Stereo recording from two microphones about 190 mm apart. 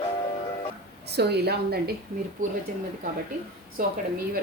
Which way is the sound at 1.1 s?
60° right (ahead or behind).